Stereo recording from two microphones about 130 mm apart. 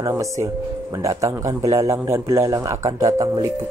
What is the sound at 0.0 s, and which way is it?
A man's voice, 25° right (ahead or behind).